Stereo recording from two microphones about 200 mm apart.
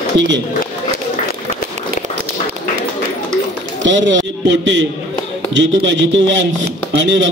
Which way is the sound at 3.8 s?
65° right (ahead or behind).